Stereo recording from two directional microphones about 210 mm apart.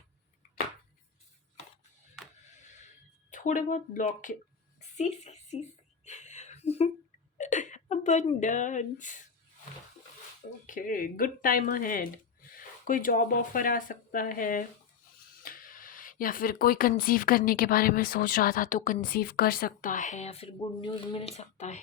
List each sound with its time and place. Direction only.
3.2 s a woman's voice: 35° left (ahead or behind)
6.1 s a sound: 35° left (ahead or behind)
10.7 s speech: 40° left (ahead or behind)